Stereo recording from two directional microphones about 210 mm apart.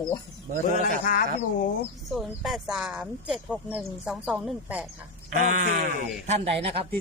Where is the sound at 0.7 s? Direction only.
40° left (ahead or behind).